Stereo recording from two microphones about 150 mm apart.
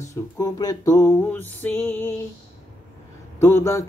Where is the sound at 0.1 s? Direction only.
25° left (ahead or behind).